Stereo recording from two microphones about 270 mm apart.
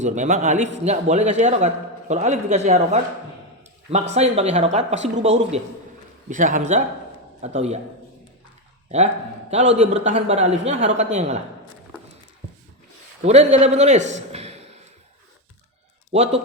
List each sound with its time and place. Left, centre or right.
0.0 s a man's voice: right
9.7 s a man's voice: right
13.2 s a man's voice: right
16.1 s a man's voice: right